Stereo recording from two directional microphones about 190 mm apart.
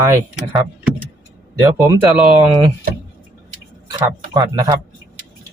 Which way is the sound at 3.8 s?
20° right (ahead or behind).